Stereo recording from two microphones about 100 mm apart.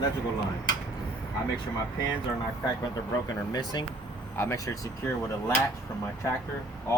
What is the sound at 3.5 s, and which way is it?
Speech, 45° left (ahead or behind).